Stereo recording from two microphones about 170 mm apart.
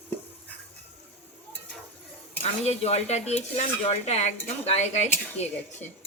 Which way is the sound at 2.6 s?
40° left (ahead or behind).